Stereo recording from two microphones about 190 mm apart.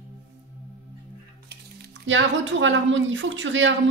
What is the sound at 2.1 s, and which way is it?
Speech, 80° right.